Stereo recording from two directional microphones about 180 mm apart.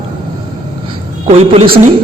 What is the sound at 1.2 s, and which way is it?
Speech, 35° right (ahead or behind).